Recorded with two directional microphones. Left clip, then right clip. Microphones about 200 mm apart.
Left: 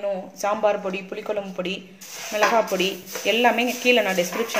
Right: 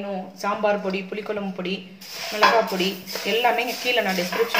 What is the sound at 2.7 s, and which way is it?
Speech, 50° left (ahead or behind).